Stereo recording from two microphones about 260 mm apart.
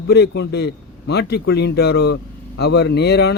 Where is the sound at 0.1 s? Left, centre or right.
Left.